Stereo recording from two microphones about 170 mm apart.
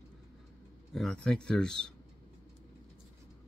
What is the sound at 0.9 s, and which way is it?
Speech, 5° left (ahead or behind).